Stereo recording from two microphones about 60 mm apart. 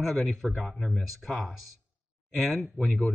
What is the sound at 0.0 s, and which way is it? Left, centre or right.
Speech, centre.